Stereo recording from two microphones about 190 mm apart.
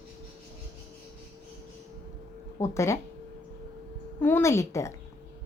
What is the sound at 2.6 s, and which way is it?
Speech, 15° left (ahead or behind).